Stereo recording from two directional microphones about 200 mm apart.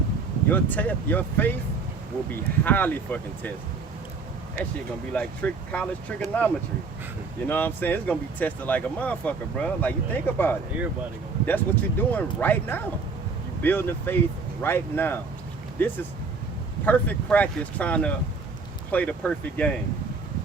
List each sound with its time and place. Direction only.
0.5 s speech: 10° left (ahead or behind)
2.6 s speech: 10° left (ahead or behind)
5.1 s speech: 5° left (ahead or behind)